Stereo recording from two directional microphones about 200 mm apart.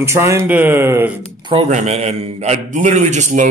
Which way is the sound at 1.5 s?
30° right (ahead or behind).